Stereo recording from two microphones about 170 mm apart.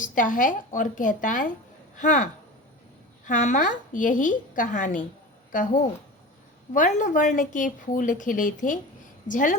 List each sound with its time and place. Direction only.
0.0 s a woman's voice: 50° left (ahead or behind)
3.2 s a woman's voice: 50° left (ahead or behind)